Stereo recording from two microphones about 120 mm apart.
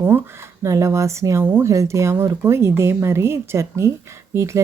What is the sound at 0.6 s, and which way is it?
Speech, 25° right (ahead or behind).